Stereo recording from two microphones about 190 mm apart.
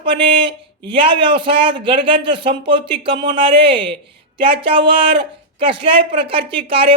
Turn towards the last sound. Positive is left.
turn(degrees=-30)  # may be behind; listen again after turning